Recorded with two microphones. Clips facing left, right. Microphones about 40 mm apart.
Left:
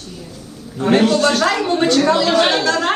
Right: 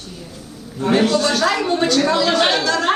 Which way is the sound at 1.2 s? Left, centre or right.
Left.